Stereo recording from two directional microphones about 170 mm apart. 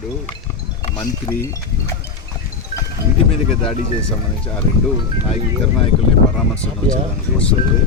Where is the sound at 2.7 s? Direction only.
45° left (ahead or behind).